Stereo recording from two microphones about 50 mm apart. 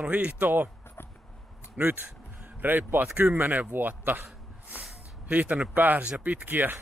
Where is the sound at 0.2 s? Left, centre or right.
Right.